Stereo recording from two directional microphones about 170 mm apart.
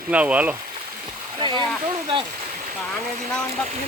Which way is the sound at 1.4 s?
25° right (ahead or behind).